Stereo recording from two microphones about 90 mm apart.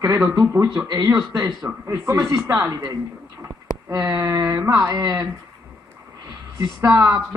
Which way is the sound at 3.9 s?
45° right (ahead or behind).